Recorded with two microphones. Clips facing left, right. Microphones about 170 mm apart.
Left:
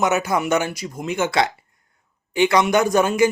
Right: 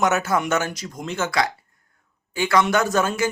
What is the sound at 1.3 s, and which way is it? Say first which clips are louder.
A man's voice: left 3 dB; 25° left (ahead or behind).